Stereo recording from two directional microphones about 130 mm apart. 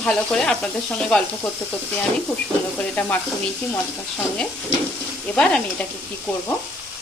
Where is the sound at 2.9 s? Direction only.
15° left (ahead or behind).